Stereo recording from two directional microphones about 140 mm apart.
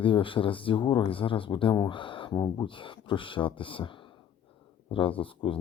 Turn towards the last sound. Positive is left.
turn(degrees=40)  # may be behind; listen again after turning